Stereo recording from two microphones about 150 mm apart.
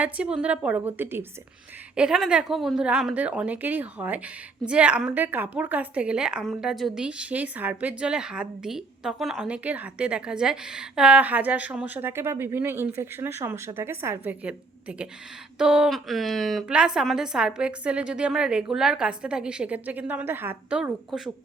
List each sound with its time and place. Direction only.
0.0 s a woman's voice: 10° right (ahead or behind)